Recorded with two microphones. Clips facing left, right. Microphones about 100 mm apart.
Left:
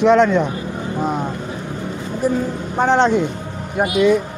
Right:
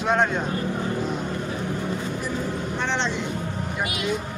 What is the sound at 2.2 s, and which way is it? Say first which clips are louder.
Speech: left 13 dB; 40° left (ahead or behind).